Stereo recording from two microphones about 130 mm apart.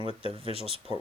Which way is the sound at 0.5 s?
50° left (ahead or behind).